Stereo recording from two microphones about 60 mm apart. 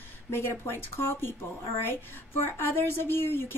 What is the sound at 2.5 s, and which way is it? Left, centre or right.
Speech, left.